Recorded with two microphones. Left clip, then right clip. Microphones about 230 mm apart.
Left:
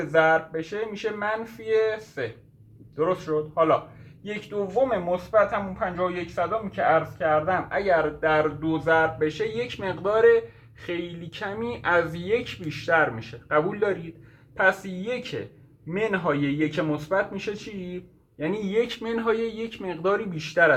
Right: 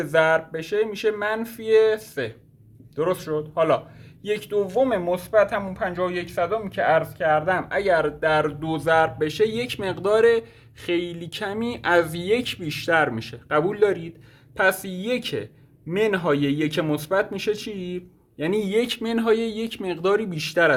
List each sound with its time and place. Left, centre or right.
0.1 s speech: right